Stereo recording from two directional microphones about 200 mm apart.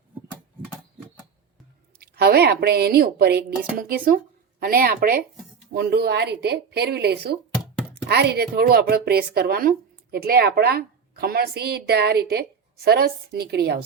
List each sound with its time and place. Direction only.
2.0 s a woman's voice: 50° right (ahead or behind)